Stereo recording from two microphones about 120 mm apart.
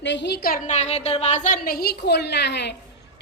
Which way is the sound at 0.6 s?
70° left (ahead or behind).